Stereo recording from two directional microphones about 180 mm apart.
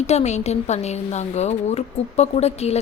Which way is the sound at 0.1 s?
40° left (ahead or behind).